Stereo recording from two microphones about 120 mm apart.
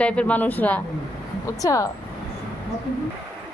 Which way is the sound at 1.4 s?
25° left (ahead or behind).